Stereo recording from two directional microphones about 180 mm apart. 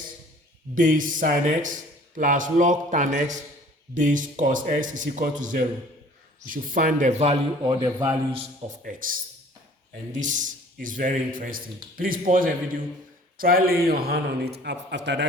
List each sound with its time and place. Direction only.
0.8 s a man's voice: 45° right (ahead or behind); by 7.9 s 25° right (ahead or behind)
7.9 s a man's voice: 15° right (ahead or behind)
8.8 s a man's voice: 50° right (ahead or behind); by 15.3 s 75° right (ahead or behind)